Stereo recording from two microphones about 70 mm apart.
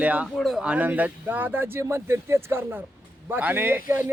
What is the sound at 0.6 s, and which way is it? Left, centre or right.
Speech, centre.